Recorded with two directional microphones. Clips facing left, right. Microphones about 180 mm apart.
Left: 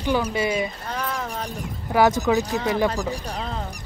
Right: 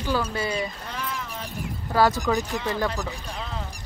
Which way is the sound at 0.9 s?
45° left (ahead or behind).